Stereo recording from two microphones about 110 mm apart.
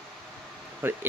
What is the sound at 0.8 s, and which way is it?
Speech, 20° right (ahead or behind).